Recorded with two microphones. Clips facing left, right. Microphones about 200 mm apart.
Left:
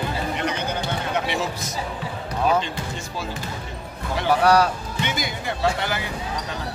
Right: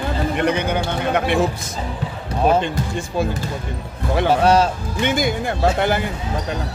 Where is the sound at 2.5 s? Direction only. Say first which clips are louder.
Right 5 dB; 55° right (ahead or behind).